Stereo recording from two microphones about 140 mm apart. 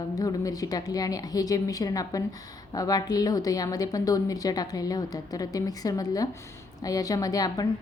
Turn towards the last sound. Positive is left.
turn(degrees=25)  # may be behind; listen again after turning